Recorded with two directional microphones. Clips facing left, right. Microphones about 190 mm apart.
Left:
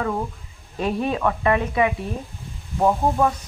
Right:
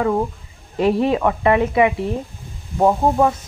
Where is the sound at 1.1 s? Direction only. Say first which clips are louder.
Right 4 dB; 20° right (ahead or behind).